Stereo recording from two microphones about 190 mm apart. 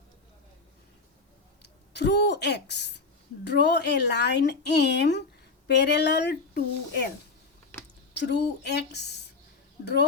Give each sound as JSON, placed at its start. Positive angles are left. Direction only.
{"t": 1.6, "sound": "a woman's voice", "side_deg": 65}
{"t": 8.1, "sound": "a woman's voice", "side_deg": 60}